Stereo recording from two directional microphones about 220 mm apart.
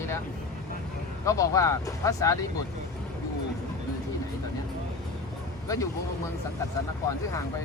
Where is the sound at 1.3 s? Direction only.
15° left (ahead or behind).